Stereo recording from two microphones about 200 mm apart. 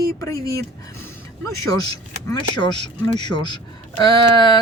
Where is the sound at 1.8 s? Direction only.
20° left (ahead or behind).